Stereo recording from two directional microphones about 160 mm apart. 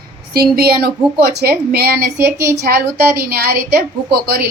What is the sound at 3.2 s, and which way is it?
A woman's voice, 75° right (ahead or behind).